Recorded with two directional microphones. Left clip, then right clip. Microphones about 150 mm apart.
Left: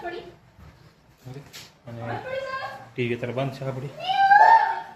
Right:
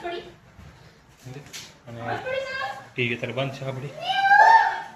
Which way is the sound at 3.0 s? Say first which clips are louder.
Right 1 dB; 30° left (ahead or behind).